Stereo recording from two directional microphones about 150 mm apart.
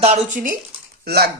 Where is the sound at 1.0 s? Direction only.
90° right.